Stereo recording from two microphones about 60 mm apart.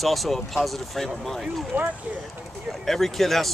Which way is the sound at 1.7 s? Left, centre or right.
Right.